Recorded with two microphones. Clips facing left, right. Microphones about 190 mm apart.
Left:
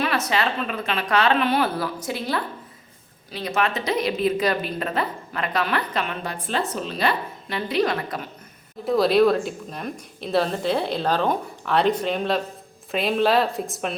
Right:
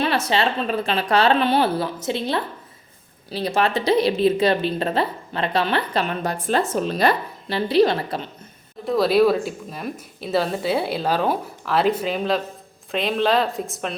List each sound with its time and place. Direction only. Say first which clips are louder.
0.0 s a woman's voice: right 2 dB; 30° right (ahead or behind)
8.8 s speech: even; centre (ahead or behind)